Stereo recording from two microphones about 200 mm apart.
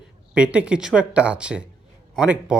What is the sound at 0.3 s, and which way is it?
A man's voice, 5° right (ahead or behind).